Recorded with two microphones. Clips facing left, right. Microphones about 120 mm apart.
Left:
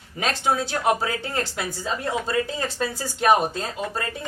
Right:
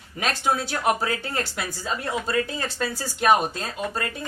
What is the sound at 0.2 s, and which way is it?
Speech, 25° left (ahead or behind).